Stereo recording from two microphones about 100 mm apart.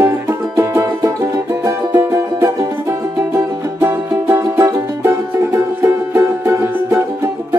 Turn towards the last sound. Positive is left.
turn(degrees=-25)  # may be behind; listen again after turning